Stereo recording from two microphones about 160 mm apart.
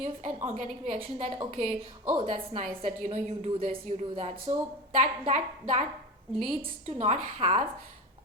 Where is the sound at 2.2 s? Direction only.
40° right (ahead or behind).